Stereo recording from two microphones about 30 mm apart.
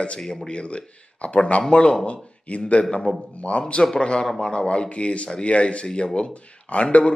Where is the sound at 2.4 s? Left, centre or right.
Left.